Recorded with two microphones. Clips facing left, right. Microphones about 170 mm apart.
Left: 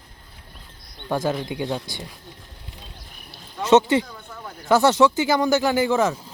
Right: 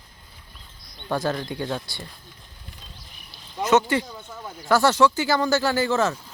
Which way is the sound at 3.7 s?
25° left (ahead or behind).